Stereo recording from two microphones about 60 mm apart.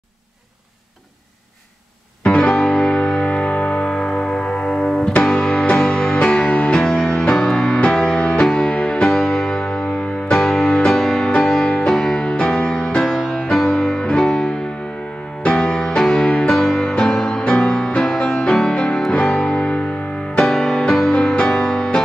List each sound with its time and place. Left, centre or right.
2.2 s music: centre
6.8 s music: centre